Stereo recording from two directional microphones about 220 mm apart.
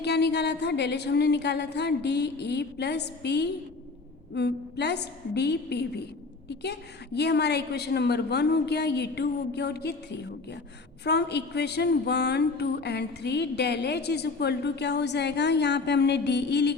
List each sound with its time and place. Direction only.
0.0 s a woman's voice: 50° left (ahead or behind)